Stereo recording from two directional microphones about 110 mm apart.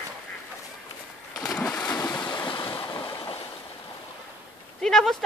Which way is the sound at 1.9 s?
30° left (ahead or behind).